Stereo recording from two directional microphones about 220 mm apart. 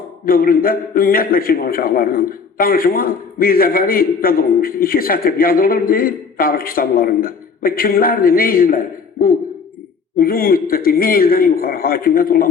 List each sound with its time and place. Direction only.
0.3 s a man's voice: 40° left (ahead or behind)
10.2 s a man's voice: 40° left (ahead or behind)